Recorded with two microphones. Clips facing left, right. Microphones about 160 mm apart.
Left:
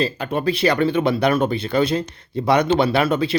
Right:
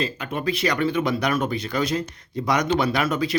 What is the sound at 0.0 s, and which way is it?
Speech, 35° left (ahead or behind).